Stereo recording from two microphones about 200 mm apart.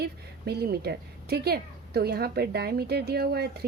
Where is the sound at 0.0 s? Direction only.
50° right (ahead or behind).